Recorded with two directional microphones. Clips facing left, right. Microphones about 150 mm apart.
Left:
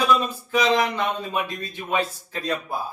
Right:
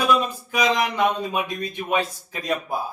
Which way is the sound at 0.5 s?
15° right (ahead or behind).